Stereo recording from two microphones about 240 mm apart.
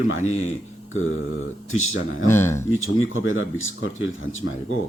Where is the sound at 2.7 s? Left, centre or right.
Left.